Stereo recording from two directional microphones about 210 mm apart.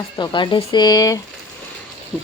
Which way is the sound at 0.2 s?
20° left (ahead or behind).